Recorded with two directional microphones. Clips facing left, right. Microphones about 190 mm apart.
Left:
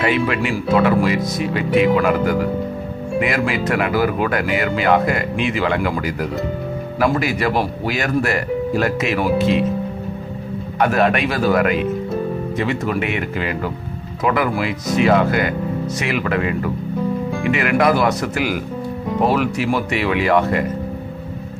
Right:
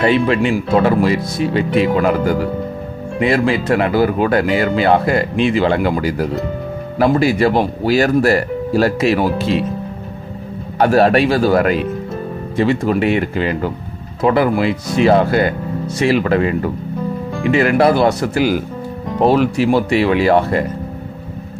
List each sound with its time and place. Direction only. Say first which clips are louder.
0.0 s speech: right 5 dB; 30° right (ahead or behind)
10.8 s speech: right 5 dB; 35° right (ahead or behind)